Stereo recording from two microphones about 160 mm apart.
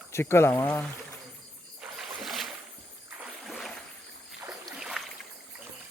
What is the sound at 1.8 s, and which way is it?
Boat, centre (ahead or behind).